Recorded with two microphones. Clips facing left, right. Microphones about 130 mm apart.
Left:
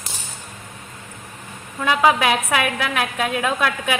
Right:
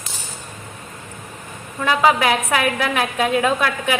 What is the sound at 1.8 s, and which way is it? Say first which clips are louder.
A woman's voice: right 1 dB; 10° left (ahead or behind).